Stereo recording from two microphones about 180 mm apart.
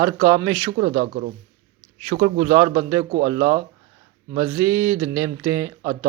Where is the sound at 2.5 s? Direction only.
25° right (ahead or behind).